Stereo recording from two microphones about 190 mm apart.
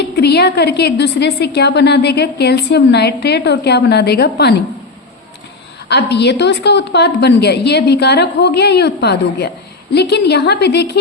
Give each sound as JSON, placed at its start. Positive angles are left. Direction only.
{"t": 0.2, "sound": "a woman's voice", "side_deg": 60}
{"t": 5.9, "sound": "a woman's voice", "side_deg": 65}